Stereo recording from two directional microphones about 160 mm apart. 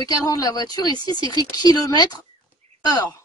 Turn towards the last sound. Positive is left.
turn(degrees=25)  # may be behind; listen again after turning